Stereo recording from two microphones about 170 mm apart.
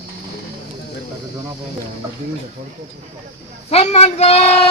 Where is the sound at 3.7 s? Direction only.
40° left (ahead or behind).